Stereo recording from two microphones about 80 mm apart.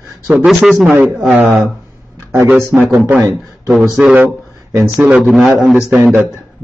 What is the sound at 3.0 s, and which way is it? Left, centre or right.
Speech, right.